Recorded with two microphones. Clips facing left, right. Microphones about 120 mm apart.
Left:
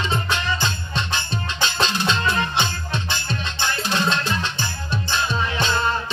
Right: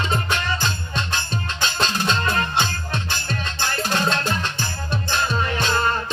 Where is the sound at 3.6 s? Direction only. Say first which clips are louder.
Even; 50° right (ahead or behind).